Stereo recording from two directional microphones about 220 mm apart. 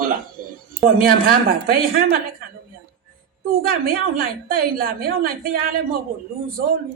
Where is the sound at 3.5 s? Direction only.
40° right (ahead or behind).